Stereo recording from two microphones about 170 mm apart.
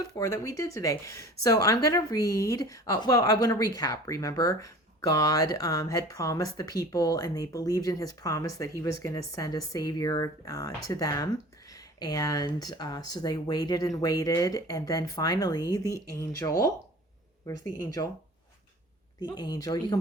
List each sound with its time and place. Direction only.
0.0 s speech: 20° left (ahead or behind)
19.2 s speech: 25° left (ahead or behind)